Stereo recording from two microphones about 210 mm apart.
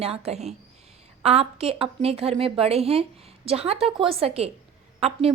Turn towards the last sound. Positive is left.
turn(degrees=-30)  # may be behind; listen again after turning